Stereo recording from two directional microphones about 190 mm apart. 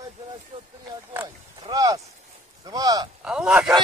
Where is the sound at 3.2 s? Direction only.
Centre (ahead or behind).